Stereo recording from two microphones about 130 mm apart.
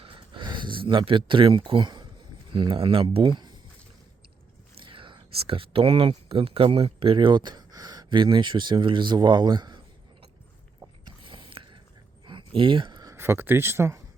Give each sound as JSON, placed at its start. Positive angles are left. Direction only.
{"t": 0.0, "sound": "speech", "side_deg": -40}
{"t": 4.7, "sound": "speech", "side_deg": -40}
{"t": 11.2, "sound": "a sound", "side_deg": -40}
{"t": 13.1, "sound": "speech", "side_deg": -15}